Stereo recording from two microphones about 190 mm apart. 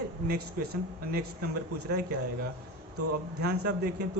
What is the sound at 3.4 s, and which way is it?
Speech, 60° right (ahead or behind).